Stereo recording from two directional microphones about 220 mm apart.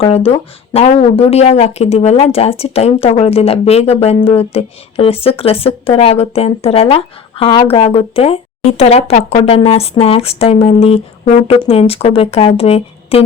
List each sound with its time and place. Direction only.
0.0 s speech: 25° left (ahead or behind)